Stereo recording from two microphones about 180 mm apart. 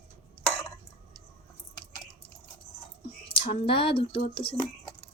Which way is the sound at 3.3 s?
30° left (ahead or behind).